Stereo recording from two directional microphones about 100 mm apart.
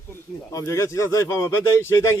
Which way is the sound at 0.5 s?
30° left (ahead or behind).